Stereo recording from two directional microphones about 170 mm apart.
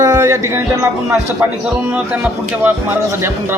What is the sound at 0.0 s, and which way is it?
Music, 15° right (ahead or behind).